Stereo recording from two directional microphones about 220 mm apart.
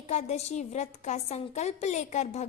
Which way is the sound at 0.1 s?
30° left (ahead or behind).